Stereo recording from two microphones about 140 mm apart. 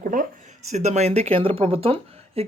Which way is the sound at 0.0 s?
75° right (ahead or behind).